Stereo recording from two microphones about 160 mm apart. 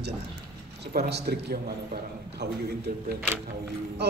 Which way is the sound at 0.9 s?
80° right.